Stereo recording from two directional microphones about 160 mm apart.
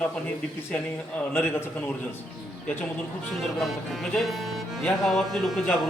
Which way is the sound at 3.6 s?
Centre (ahead or behind).